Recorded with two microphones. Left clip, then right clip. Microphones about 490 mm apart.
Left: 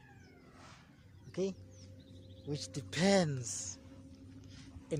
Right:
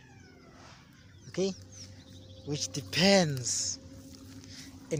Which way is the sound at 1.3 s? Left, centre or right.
Left.